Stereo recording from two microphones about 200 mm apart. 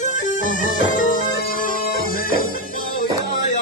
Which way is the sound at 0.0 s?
40° left (ahead or behind).